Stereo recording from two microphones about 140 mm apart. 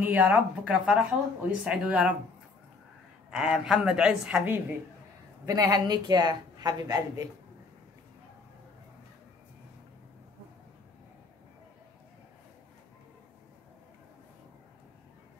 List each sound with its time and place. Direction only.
0.0 s speech: 10° right (ahead or behind)
3.3 s a woman's voice: 5° right (ahead or behind)
5.4 s speech: 25° right (ahead or behind)